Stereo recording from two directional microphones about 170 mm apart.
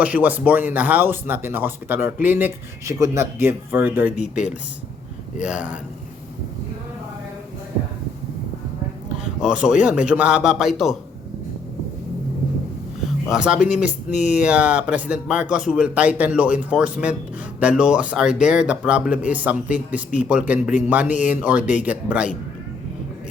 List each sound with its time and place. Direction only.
0.0 s speech: 10° right (ahead or behind)
5.4 s speech: 5° right (ahead or behind)
9.4 s a man's voice: 5° right (ahead or behind)
13.2 s a man's voice: 5° right (ahead or behind)